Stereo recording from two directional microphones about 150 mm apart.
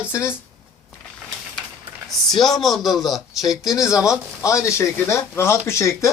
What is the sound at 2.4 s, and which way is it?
A man's voice, centre (ahead or behind).